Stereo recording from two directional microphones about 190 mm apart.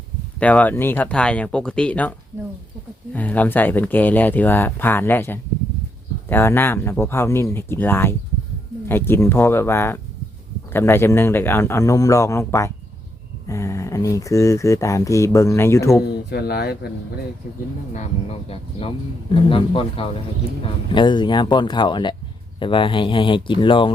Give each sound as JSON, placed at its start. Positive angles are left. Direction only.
{"t": 0.3, "sound": "speech", "side_deg": 5}
{"t": 16.0, "sound": "speech", "side_deg": 55}
{"t": 17.9, "sound": "speech", "side_deg": 35}